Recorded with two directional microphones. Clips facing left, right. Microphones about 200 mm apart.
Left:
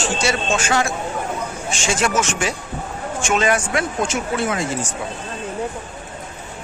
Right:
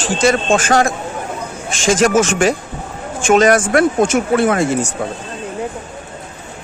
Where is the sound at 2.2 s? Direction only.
90° right.